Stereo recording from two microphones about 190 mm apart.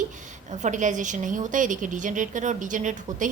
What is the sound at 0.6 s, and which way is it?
A woman's voice, 40° right (ahead or behind).